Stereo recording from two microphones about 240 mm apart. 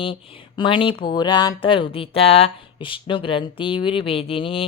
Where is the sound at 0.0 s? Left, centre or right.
Left.